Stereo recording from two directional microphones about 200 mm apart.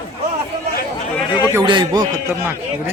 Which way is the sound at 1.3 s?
20° left (ahead or behind).